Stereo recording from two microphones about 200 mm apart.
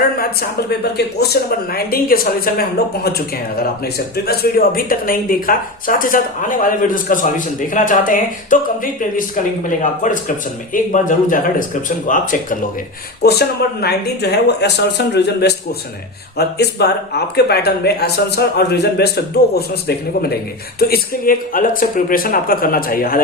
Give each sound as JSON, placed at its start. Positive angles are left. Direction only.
{"t": 0.9, "sound": "speech", "side_deg": 55}
{"t": 4.3, "sound": "a man's voice", "side_deg": 45}
{"t": 13.2, "sound": "speech", "side_deg": 55}